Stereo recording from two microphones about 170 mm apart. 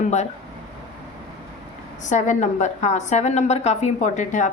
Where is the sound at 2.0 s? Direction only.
45° left (ahead or behind).